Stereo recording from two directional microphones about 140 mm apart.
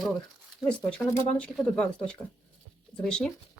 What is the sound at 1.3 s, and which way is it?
Speech, 5° left (ahead or behind).